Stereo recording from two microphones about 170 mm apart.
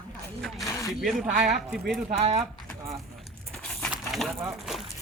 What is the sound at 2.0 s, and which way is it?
Speech, 35° right (ahead or behind).